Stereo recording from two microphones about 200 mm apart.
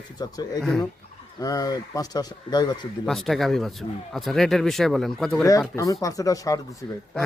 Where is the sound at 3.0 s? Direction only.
Centre (ahead or behind).